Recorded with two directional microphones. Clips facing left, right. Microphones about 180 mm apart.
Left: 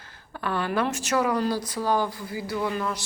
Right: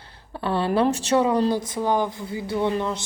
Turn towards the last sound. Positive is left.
turn(degrees=-25)  # may be behind; listen again after turning